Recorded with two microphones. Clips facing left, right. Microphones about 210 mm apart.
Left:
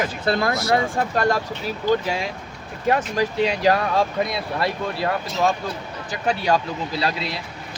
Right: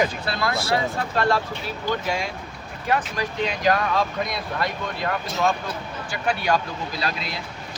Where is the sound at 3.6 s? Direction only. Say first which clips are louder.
Even; 30° left (ahead or behind).